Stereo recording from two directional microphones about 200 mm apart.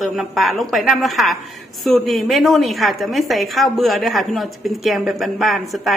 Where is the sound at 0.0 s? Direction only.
Centre (ahead or behind).